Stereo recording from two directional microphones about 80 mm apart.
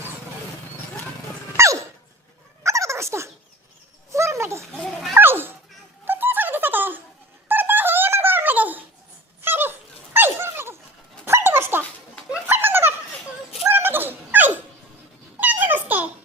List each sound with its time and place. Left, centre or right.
1.5 s gasp: right
2.6 s turkey: right
4.1 s a sound: right
9.4 s dog: right
12.3 s a sound: right
13.7 s dog: right